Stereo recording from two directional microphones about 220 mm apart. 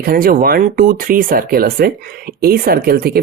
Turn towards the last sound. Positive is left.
turn(degrees=-45)  # may be behind; listen again after turning